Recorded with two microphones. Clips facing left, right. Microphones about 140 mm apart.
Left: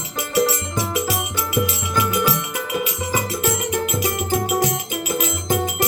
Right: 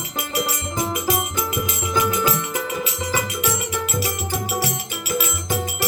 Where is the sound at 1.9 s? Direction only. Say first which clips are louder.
Even; 5° left (ahead or behind).